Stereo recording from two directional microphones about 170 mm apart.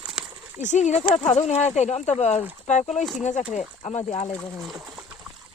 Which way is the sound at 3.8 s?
30° left (ahead or behind).